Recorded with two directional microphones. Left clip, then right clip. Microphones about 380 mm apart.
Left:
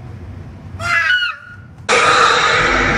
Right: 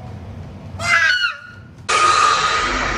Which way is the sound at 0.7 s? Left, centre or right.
Centre.